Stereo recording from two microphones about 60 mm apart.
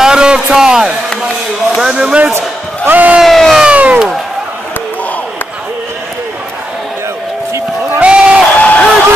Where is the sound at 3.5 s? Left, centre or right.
Centre.